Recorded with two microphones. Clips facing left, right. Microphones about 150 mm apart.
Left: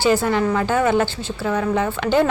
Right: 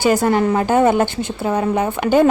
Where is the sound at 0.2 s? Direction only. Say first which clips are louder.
Right 4 dB; 45° right (ahead or behind).